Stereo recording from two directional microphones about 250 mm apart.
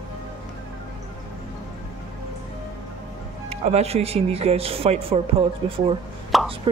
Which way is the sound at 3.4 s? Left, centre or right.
Right.